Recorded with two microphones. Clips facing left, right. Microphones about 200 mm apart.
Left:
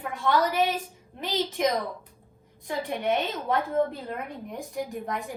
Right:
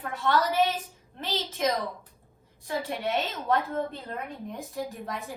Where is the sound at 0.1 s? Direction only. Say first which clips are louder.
Left 1 dB; 15° left (ahead or behind).